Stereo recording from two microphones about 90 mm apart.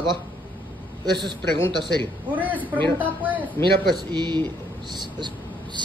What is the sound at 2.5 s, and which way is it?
Speech, 20° left (ahead or behind).